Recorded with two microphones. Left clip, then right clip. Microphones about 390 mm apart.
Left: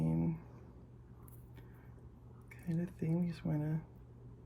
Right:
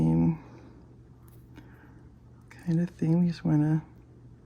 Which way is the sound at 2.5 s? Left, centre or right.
Centre.